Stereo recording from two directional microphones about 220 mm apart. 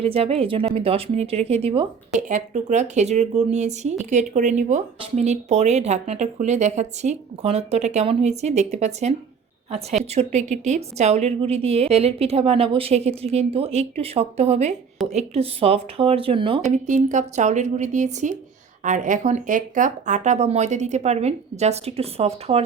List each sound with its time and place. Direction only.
0.0 s a woman's voice: 25° right (ahead or behind)
16.7 s speech: 35° right (ahead or behind)